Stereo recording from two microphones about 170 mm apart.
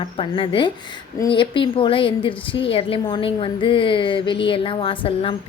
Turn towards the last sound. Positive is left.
turn(degrees=30)  # may be behind; listen again after turning